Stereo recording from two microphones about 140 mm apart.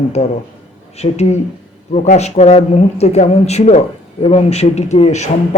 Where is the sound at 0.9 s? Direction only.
50° left (ahead or behind).